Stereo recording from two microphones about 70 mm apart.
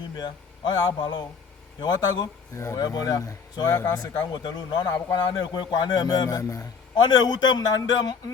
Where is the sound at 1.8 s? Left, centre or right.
Left.